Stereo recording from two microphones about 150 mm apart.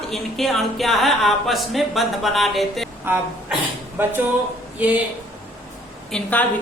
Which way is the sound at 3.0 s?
10° right (ahead or behind).